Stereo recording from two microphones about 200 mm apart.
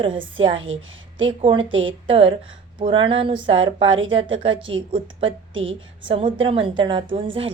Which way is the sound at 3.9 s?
75° right (ahead or behind).